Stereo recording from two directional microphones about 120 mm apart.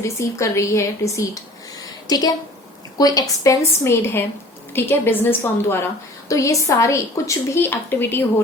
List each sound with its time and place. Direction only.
0.0 s a woman's voice: 25° left (ahead or behind)